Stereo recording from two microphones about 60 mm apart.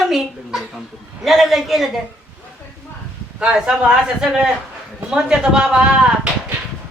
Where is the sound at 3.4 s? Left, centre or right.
Centre.